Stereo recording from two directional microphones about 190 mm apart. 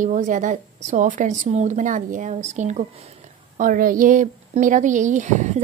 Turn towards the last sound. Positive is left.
turn(degrees=-40)  # may be behind; listen again after turning